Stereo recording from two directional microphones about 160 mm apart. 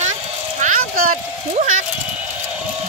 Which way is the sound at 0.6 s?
50° right (ahead or behind).